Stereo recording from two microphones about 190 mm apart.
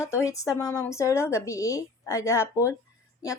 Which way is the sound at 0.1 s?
15° left (ahead or behind).